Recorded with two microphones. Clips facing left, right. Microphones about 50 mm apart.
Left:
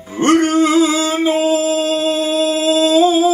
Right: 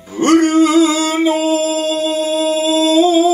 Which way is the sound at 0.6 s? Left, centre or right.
Left.